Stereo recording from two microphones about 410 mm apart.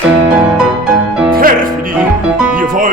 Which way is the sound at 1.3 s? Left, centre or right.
Right.